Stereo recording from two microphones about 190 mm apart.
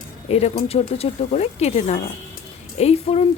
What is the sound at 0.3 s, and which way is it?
Speech, 35° left (ahead or behind).